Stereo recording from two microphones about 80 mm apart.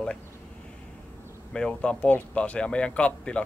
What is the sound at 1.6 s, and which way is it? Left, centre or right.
Speech, centre.